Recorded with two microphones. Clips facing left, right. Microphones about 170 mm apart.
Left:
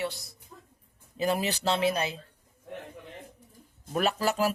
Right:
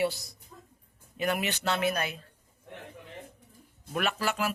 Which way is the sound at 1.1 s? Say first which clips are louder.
Left 2 dB; 30° left (ahead or behind).